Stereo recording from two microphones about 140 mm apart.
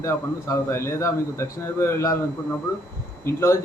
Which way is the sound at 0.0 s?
20° left (ahead or behind).